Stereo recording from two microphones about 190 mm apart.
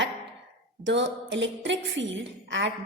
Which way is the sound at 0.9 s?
70° right (ahead or behind).